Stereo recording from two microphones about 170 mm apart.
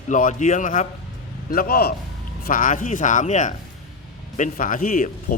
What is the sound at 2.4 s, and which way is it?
A man's voice, 50° left (ahead or behind).